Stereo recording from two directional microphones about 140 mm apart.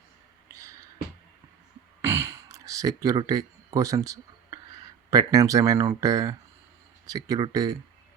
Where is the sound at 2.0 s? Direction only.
20° right (ahead or behind).